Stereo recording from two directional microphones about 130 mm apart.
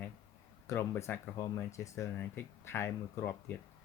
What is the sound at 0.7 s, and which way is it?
Speech, 20° left (ahead or behind).